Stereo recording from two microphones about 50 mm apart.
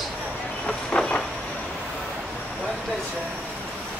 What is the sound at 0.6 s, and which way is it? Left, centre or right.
Train, centre.